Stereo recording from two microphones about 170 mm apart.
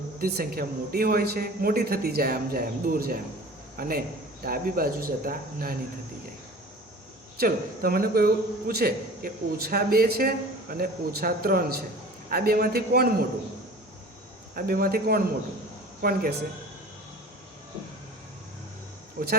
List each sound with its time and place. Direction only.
0.2 s a man's voice: 60° right (ahead or behind)
7.3 s a man's voice: 60° right (ahead or behind)
14.5 s a man's voice: 60° right (ahead or behind)
19.2 s speech: 65° right (ahead or behind)